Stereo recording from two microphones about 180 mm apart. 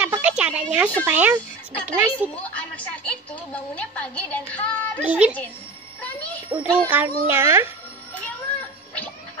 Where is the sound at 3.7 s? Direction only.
10° left (ahead or behind).